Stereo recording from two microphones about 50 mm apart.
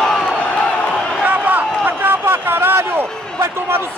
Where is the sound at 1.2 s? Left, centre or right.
Right.